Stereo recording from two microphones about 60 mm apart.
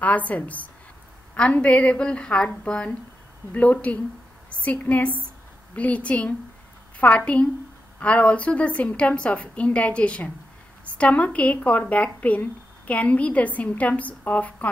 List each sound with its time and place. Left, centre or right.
0.0 s a woman's voice: left